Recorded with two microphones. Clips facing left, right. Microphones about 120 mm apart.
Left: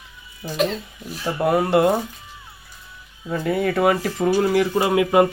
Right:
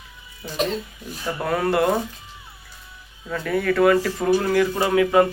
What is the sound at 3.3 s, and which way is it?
Speech, 25° left (ahead or behind).